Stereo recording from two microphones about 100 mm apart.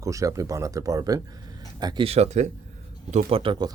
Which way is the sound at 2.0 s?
85° right.